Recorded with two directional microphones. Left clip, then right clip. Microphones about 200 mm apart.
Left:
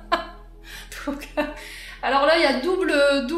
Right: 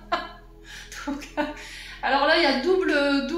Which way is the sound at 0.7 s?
55° left (ahead or behind).